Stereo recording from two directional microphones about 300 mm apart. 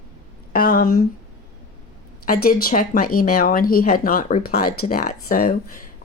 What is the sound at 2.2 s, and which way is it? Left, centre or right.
A woman's voice, left.